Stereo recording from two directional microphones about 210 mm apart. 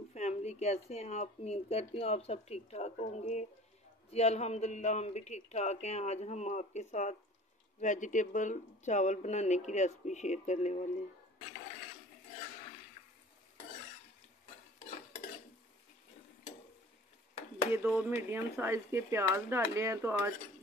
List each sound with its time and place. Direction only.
0.1 s speech: 30° left (ahead or behind)
17.8 s speech: 5° right (ahead or behind)